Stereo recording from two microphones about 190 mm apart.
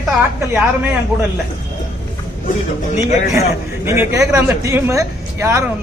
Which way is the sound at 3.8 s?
15° right (ahead or behind).